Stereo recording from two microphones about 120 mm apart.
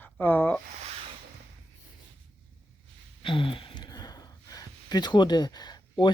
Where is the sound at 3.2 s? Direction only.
45° left (ahead or behind).